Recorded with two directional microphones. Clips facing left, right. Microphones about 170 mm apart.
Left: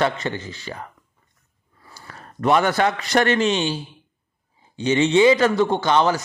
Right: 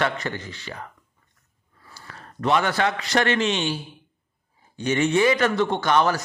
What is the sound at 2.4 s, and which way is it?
Speech, 45° left (ahead or behind).